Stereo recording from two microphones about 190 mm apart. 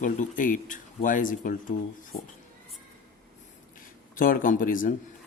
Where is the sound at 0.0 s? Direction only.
45° left (ahead or behind).